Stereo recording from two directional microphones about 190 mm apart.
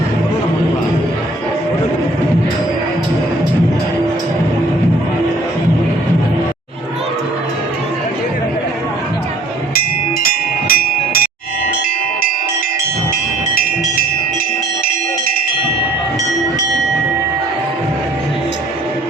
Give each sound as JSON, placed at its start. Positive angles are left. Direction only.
{"t": 10.2, "sound": "bell", "side_deg": 50}